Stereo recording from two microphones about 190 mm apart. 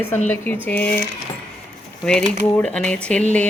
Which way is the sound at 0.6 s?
10° left (ahead or behind).